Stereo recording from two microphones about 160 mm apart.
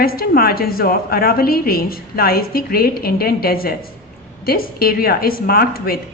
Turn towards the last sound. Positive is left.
turn(degrees=70)  # may be behind; listen again after turning